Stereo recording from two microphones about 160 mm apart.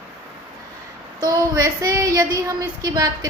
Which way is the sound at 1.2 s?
25° right (ahead or behind).